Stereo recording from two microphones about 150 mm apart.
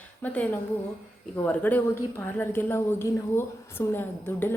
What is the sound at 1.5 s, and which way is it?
Speech, 10° left (ahead or behind).